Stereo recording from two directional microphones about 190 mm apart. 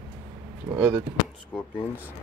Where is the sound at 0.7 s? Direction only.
10° right (ahead or behind).